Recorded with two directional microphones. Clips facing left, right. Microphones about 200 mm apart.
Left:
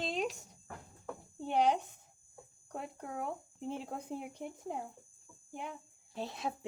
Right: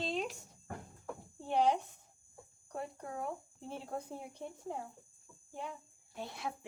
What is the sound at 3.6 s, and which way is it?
Speech, 20° left (ahead or behind).